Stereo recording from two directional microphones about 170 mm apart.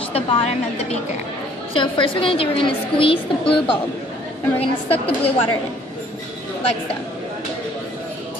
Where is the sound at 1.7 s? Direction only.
30° left (ahead or behind).